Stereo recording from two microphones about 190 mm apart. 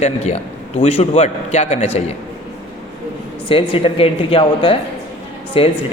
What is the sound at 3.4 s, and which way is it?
A woman's voice, 30° left (ahead or behind).